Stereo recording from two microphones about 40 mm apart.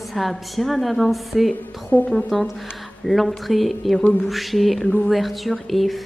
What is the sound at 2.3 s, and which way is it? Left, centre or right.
Speech, centre.